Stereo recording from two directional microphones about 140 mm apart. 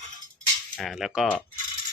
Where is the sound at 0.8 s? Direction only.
Centre (ahead or behind).